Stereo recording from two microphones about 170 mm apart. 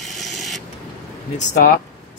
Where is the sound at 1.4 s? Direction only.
50° left (ahead or behind).